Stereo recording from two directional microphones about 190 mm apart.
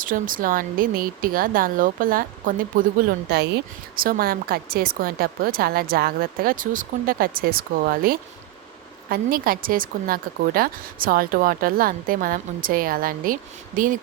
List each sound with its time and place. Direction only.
0.0 s speech: 45° right (ahead or behind)